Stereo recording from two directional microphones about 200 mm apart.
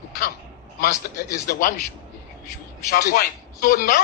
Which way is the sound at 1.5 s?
45° left (ahead or behind).